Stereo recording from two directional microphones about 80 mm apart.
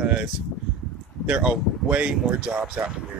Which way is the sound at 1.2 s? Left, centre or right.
Centre.